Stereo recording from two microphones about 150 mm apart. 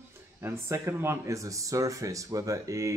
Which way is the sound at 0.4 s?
15° right (ahead or behind).